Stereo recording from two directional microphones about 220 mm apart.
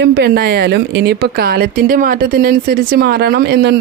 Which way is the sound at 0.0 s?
50° right (ahead or behind).